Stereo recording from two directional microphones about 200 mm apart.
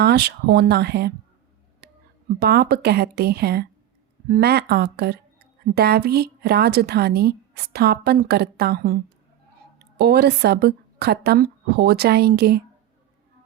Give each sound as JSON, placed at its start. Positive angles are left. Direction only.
{"t": 0.0, "sound": "speech", "side_deg": -55}
{"t": 1.8, "sound": "music", "side_deg": -55}
{"t": 2.4, "sound": "a woman's voice", "side_deg": -55}